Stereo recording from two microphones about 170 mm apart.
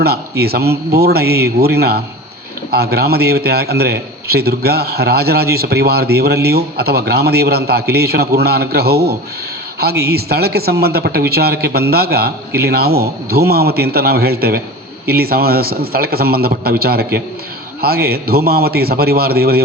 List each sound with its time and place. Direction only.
0.0 s a man's voice: 70° right (ahead or behind)